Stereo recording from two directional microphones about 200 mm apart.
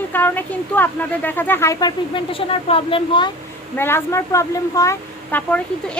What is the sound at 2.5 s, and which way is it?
Speech, 30° left (ahead or behind).